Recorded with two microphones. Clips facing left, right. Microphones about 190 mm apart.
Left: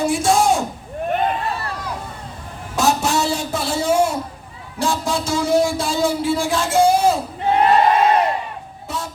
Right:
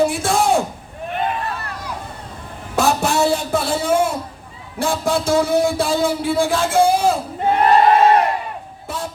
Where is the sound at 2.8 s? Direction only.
55° right (ahead or behind).